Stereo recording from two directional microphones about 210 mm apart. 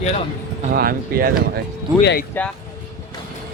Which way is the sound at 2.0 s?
55° left (ahead or behind).